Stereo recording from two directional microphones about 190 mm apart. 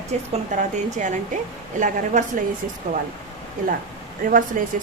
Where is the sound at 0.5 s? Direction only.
40° right (ahead or behind).